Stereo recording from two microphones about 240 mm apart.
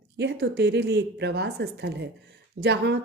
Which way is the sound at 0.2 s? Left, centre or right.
Right.